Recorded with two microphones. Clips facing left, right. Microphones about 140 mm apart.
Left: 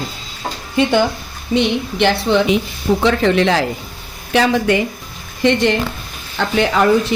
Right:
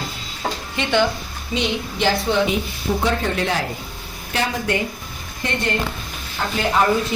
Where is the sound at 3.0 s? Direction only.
90° left.